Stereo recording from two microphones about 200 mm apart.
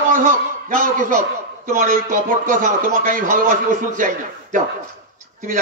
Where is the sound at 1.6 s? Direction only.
40° right (ahead or behind).